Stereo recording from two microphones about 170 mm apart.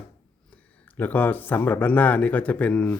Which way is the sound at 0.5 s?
10° left (ahead or behind).